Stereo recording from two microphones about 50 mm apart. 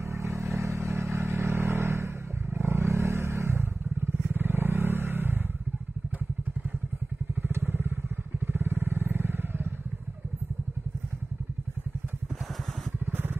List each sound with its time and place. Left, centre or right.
0.2 s vehicle: right
2.5 s vehicle: right
7.4 s motorcycle: right
8.5 s vehicle: right
13.0 s vehicle: right